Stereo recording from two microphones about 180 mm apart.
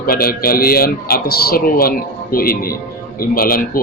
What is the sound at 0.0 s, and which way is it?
A man's voice, 55° left (ahead or behind).